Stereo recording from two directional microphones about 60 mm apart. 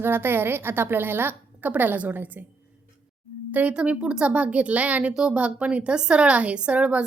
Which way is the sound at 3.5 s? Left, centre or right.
Right.